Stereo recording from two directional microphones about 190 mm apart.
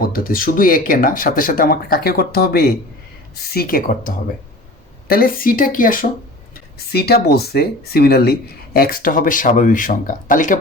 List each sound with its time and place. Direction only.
0.0 s speech: 50° left (ahead or behind)
6.9 s speech: 55° left (ahead or behind)